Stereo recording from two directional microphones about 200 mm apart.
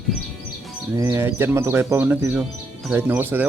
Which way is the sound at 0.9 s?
15° right (ahead or behind).